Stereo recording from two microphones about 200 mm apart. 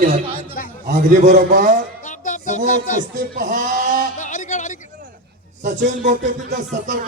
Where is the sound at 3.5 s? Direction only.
40° right (ahead or behind).